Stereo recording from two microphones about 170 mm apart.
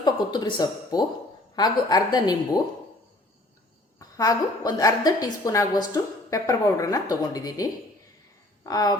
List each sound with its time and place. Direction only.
0.0 s a woman's voice: 25° left (ahead or behind)
3.9 s a woman's voice: 20° left (ahead or behind)